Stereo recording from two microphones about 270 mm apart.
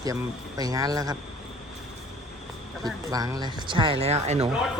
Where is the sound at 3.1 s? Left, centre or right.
Centre.